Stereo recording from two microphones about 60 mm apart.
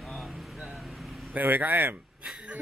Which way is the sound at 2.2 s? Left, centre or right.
Right.